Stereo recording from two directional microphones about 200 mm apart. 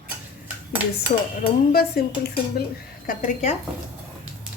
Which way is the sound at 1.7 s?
50° left (ahead or behind).